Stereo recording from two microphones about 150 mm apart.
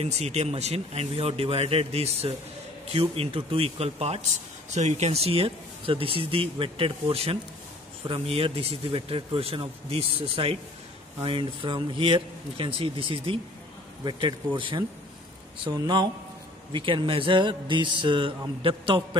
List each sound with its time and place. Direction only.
0.0 s speech: 45° right (ahead or behind)